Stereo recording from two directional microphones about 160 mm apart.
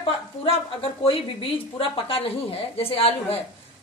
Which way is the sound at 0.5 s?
35° left (ahead or behind).